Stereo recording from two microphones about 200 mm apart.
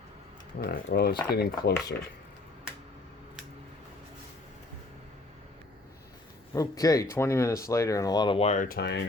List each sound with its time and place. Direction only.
0.6 s speech: 50° left (ahead or behind)
6.5 s speech: 15° left (ahead or behind); by 9.0 s 60° left (ahead or behind)